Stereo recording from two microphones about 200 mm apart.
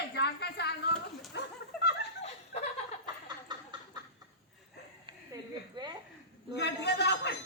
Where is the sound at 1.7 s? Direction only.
Centre (ahead or behind).